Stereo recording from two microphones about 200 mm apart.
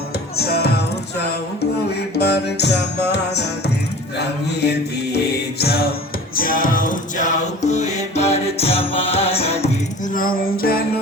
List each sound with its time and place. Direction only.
0.3 s music: 50° left (ahead or behind)
2.1 s music: 55° left (ahead or behind); by 9.6 s 30° left (ahead or behind)
10.2 s music: 45° left (ahead or behind)